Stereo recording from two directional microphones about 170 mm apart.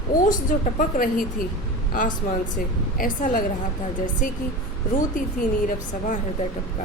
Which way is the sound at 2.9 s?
55° left (ahead or behind).